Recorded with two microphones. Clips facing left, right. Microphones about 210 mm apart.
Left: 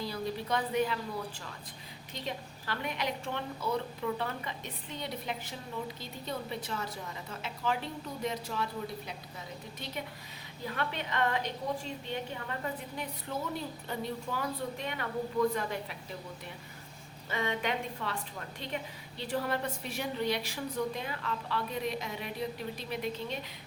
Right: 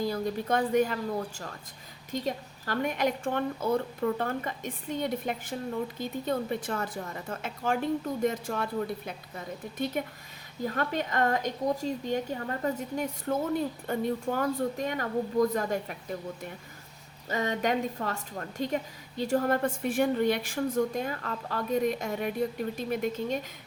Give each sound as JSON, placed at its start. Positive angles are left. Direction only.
{"t": 0.0, "sound": "a woman's voice", "side_deg": -50}
{"t": 2.1, "sound": "a woman's voice", "side_deg": -45}
{"t": 17.2, "sound": "a woman's voice", "side_deg": -40}